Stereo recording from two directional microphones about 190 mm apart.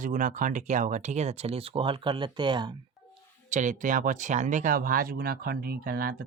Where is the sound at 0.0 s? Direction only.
45° right (ahead or behind); by 2.7 s 25° right (ahead or behind).